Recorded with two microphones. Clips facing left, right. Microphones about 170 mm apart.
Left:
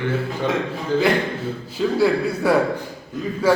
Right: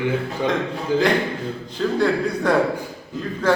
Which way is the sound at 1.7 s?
5° left (ahead or behind).